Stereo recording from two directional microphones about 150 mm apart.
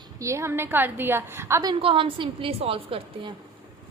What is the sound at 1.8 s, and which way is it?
A woman's voice, 35° right (ahead or behind).